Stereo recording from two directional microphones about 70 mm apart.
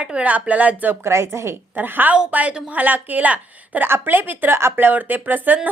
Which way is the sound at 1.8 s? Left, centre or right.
Right.